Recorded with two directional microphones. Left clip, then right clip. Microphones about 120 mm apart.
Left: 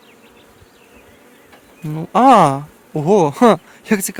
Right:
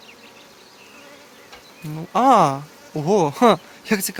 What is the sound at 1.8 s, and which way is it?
Speech, 90° left.